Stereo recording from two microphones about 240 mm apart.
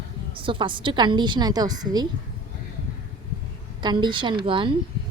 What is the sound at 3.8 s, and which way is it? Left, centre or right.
Speech, centre.